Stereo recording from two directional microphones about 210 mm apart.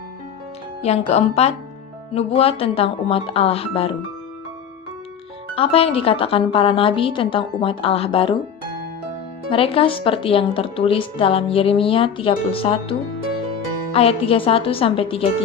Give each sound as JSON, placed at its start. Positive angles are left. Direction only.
{"t": 0.8, "sound": "speech", "side_deg": 30}
{"t": 5.5, "sound": "speech", "side_deg": 25}
{"t": 9.5, "sound": "speech", "side_deg": 25}